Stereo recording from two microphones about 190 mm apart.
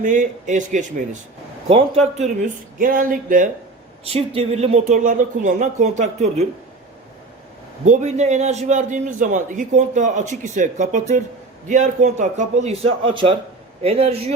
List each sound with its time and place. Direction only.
0.0 s a man's voice: 40° right (ahead or behind)
2.7 s speech: 45° right (ahead or behind)
4.0 s a man's voice: 30° right (ahead or behind)
7.9 s a man's voice: 35° right (ahead or behind)